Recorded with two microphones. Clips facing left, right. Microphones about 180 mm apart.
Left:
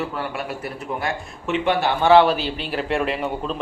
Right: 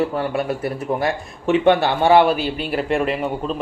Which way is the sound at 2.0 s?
10° right (ahead or behind).